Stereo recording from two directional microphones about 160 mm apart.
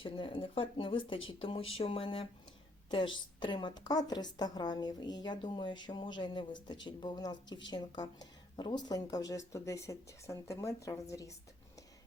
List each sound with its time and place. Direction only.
0.0 s a woman's voice: 30° left (ahead or behind)